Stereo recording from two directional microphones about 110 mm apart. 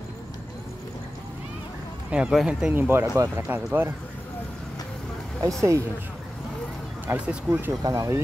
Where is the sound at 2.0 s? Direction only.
10° right (ahead or behind).